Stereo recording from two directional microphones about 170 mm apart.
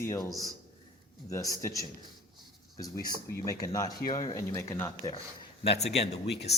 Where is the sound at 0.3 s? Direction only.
20° right (ahead or behind).